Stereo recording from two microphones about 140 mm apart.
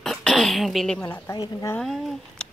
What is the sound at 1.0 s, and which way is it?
Speech, 20° left (ahead or behind).